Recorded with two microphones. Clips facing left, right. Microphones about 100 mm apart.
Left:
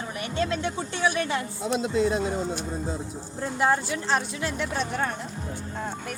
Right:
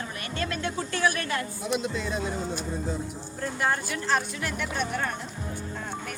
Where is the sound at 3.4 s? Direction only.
20° left (ahead or behind).